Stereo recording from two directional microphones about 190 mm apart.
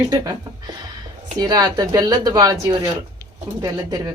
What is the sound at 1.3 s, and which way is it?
Speech, 20° right (ahead or behind).